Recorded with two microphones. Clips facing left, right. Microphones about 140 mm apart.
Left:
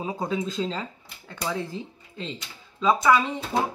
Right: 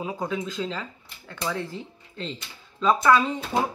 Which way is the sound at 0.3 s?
30° left (ahead or behind).